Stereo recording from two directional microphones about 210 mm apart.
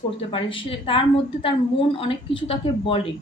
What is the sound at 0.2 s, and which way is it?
Speech, 25° left (ahead or behind).